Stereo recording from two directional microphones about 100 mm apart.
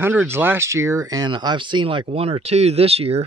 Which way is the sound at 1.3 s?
50° right (ahead or behind).